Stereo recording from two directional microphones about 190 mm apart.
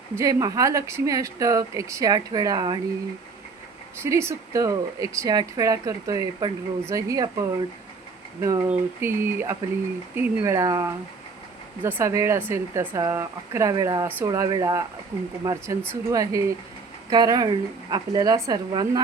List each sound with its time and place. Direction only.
0.2 s speech: 15° right (ahead or behind)
4.0 s speech: 15° right (ahead or behind)